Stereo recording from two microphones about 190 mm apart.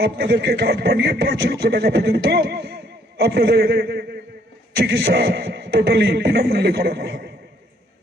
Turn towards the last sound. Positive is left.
turn(degrees=-55)  # may be behind; listen again after turning